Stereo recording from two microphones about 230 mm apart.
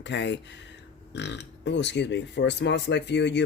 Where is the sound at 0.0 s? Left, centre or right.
Left.